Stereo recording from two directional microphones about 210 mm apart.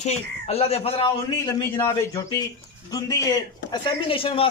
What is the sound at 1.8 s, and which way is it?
Speech, 15° left (ahead or behind).